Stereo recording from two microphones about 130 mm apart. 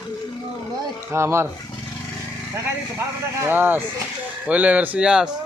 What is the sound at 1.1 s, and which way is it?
Speech, 20° right (ahead or behind).